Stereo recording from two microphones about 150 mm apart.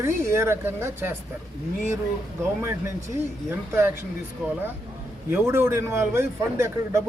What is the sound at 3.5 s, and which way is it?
Speech, 15° right (ahead or behind).